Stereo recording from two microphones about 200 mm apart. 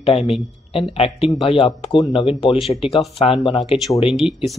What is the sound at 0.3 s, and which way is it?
Speech, 25° left (ahead or behind).